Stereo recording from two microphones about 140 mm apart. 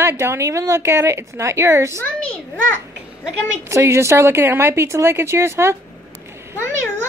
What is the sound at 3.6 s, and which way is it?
Speech, 20° right (ahead or behind).